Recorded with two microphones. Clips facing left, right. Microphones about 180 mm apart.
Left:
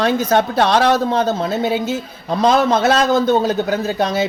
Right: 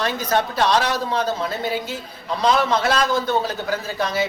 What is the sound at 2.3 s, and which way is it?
Speech, 45° left (ahead or behind).